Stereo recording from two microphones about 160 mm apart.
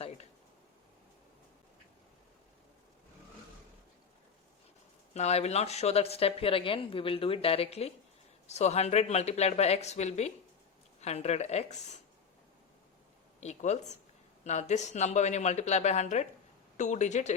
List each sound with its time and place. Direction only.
0.0 s a sound: 40° left (ahead or behind)
5.1 s a woman's voice: 45° left (ahead or behind)
13.4 s a woman's voice: 45° left (ahead or behind)